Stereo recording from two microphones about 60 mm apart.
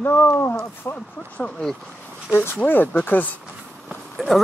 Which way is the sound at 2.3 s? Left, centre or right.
Left.